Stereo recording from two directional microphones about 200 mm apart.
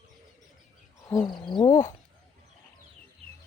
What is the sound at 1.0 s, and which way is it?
Wild animals, 20° left (ahead or behind).